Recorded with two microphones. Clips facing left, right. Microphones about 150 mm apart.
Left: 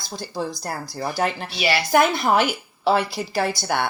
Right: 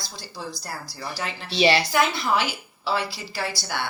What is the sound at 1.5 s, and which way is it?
Speech, 30° right (ahead or behind).